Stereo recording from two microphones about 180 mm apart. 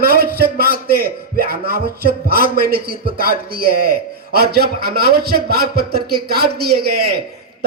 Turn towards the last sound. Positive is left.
turn(degrees=-60)  # may be behind; listen again after turning